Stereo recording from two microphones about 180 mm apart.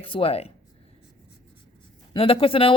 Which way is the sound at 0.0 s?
30° left (ahead or behind).